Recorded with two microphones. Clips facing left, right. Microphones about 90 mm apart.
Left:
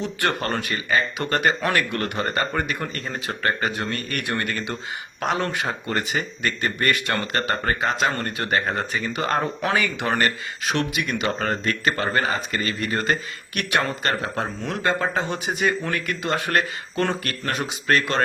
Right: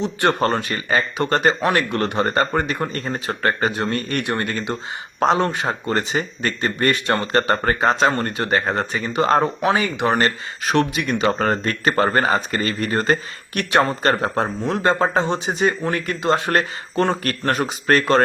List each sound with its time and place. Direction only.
0.0 s speech: 25° right (ahead or behind)
10.7 s speech: 35° right (ahead or behind)
17.2 s speech: 40° right (ahead or behind)